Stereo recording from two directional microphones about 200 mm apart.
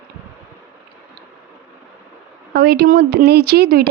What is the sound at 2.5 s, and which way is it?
Speech, 50° right (ahead or behind).